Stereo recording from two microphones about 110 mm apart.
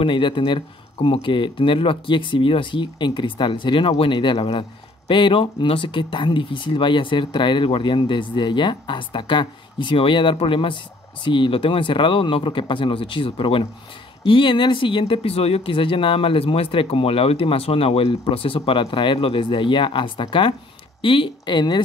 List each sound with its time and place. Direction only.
0.0 s speech: 50° left (ahead or behind)